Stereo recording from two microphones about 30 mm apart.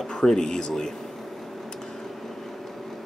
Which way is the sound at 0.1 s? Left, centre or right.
Left.